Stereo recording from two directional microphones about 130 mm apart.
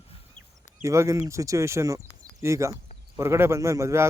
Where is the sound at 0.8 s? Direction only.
25° right (ahead or behind).